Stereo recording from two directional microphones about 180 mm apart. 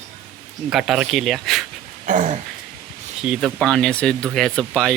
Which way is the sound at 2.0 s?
45° right (ahead or behind).